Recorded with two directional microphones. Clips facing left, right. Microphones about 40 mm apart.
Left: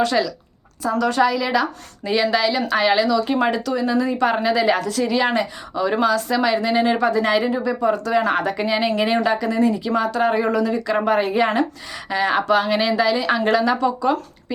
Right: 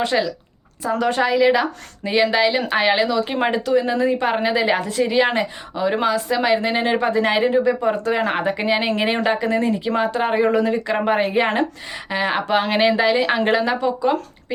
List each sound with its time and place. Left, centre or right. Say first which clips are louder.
0.0 s speech: left 1 dB; right
12.6 s speech: right 2 dB; right; by 14.2 s centre